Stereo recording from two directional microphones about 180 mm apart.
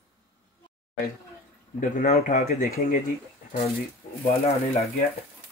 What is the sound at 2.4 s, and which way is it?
Speech, 55° left (ahead or behind).